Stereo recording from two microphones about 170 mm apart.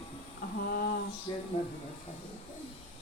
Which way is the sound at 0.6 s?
65° left (ahead or behind).